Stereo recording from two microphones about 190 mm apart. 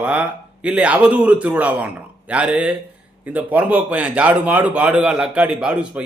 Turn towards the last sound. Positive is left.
turn(degrees=-5)  # may be behind; listen again after turning